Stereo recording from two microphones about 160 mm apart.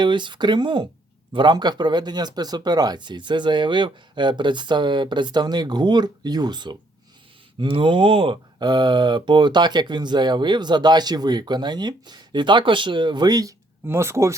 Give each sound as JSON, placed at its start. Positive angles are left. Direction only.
{"t": 0.0, "sound": "speech", "side_deg": -30}